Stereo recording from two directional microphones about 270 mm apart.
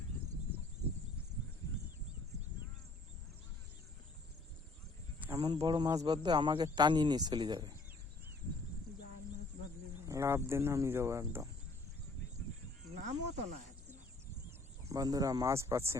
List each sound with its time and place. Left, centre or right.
5.3 s speech: centre
10.1 s speech: centre
13.1 s speech: right
14.8 s speech: centre